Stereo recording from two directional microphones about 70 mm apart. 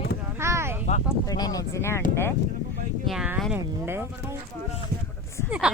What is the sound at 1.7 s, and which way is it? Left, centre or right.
Speech, left.